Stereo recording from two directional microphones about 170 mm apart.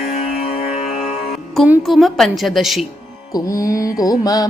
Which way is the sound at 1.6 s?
5° right (ahead or behind).